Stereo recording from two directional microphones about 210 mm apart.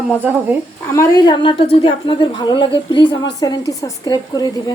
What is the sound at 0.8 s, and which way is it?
A woman's voice, 15° left (ahead or behind).